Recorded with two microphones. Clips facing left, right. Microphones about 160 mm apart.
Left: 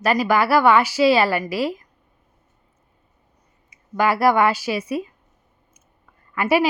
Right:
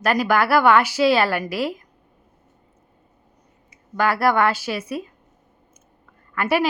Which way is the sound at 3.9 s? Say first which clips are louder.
Left 2 dB; 10° left (ahead or behind).